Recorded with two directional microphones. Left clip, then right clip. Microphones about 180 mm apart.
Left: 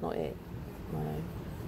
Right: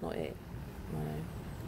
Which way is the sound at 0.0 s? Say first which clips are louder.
Left 4 dB; 15° right (ahead or behind).